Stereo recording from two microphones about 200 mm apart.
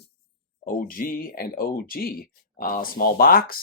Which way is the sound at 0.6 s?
45° left (ahead or behind).